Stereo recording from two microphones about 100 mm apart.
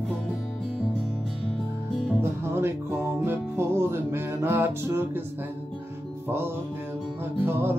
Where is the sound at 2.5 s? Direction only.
20° right (ahead or behind).